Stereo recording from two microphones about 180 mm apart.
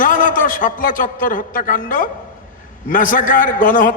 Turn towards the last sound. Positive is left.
turn(degrees=50)  # may be behind; listen again after turning